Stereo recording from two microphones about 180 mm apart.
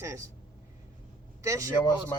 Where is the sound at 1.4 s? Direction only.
15° right (ahead or behind).